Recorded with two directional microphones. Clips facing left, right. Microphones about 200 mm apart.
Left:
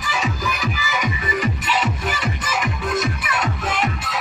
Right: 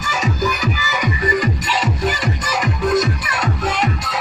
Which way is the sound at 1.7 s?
35° right (ahead or behind).